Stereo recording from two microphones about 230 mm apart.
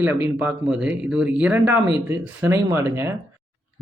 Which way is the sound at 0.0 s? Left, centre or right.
Centre.